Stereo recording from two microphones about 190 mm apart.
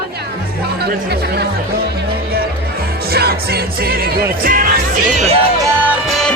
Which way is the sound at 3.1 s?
55° right (ahead or behind).